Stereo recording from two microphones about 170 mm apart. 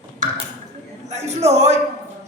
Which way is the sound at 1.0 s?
40° right (ahead or behind).